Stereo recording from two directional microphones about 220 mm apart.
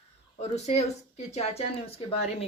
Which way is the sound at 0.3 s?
30° left (ahead or behind).